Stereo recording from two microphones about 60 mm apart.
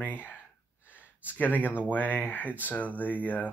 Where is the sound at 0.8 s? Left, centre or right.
Left.